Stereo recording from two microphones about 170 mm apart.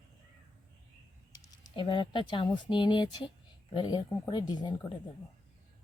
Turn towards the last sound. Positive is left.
turn(degrees=25)  # may be behind; listen again after turning